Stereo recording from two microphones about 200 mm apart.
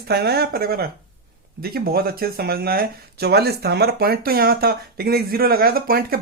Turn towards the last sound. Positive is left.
turn(degrees=-50)  # may be behind; listen again after turning